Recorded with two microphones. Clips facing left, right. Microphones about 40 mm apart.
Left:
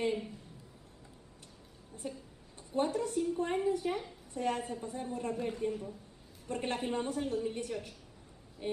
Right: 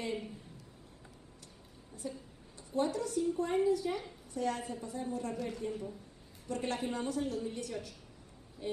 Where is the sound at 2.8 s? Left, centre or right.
Left.